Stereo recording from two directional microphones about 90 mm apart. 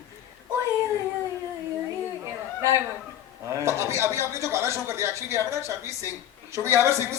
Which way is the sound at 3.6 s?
30° right (ahead or behind).